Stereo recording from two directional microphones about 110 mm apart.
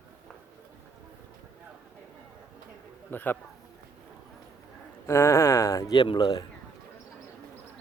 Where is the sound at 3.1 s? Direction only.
15° left (ahead or behind).